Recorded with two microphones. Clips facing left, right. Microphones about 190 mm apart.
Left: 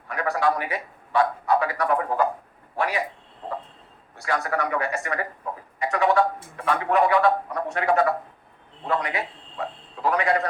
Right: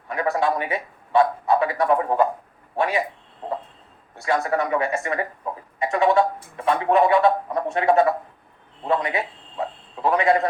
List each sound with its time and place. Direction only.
0.1 s a man's voice: 25° right (ahead or behind)
4.2 s a man's voice: 25° right (ahead or behind)